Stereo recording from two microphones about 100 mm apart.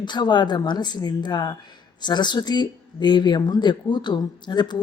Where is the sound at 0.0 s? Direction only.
50° left (ahead or behind).